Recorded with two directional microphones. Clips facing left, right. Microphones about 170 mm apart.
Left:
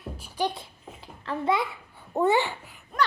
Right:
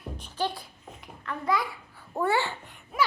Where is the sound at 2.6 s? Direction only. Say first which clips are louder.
Left 1 dB; centre (ahead or behind).